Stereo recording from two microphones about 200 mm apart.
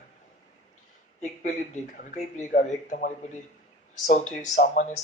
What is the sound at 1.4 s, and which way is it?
A man's voice, 40° left (ahead or behind).